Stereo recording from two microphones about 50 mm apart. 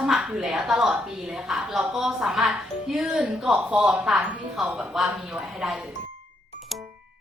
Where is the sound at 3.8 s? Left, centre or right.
Right.